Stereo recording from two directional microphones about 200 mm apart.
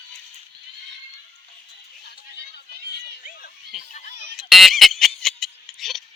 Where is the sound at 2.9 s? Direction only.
45° left (ahead or behind).